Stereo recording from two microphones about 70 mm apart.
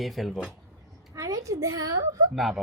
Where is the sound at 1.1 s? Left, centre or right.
Right.